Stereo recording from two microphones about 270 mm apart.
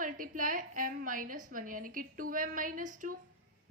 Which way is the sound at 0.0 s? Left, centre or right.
Right.